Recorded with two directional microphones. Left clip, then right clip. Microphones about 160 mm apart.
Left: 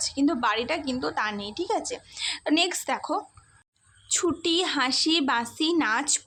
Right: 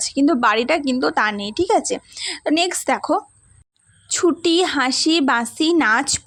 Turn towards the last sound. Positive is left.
turn(degrees=-45)  # may be behind; listen again after turning